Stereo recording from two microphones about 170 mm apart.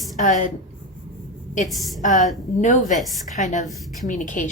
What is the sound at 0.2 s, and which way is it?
Speech, 45° left (ahead or behind).